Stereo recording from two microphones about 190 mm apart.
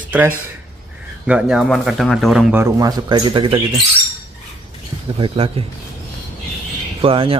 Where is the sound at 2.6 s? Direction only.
20° right (ahead or behind).